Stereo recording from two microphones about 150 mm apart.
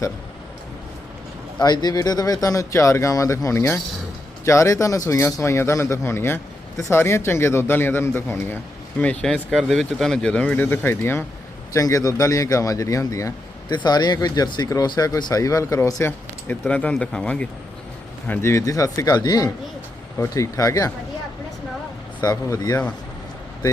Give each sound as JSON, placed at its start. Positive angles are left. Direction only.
{"t": 1.5, "sound": "speech", "side_deg": 30}
{"t": 22.2, "sound": "speech", "side_deg": 20}